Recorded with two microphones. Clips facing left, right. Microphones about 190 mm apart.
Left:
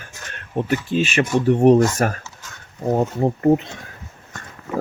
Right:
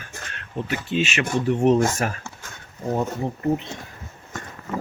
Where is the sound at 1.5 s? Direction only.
55° left (ahead or behind).